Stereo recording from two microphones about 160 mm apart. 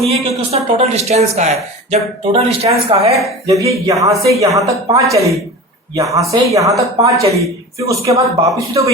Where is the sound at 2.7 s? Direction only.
30° right (ahead or behind).